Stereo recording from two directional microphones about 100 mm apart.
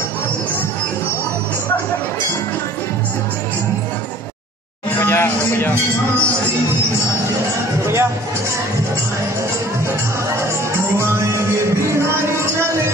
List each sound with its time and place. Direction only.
5.0 s a sound: 25° left (ahead or behind)
7.8 s music: 25° right (ahead or behind)
10.7 s music: 25° right (ahead or behind)